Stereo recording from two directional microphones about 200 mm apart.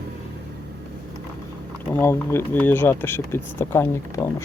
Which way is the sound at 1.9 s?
10° left (ahead or behind).